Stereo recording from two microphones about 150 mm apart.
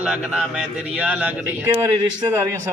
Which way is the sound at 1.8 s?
20° right (ahead or behind).